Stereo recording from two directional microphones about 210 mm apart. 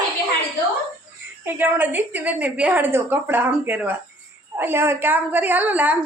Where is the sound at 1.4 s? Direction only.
10° right (ahead or behind).